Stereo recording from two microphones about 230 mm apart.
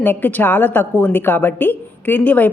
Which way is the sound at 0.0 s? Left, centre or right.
Centre.